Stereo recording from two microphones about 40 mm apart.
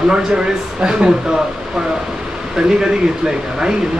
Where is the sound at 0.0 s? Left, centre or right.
Centre.